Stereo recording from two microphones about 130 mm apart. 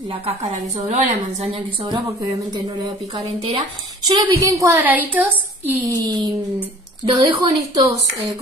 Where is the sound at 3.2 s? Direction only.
50° right (ahead or behind).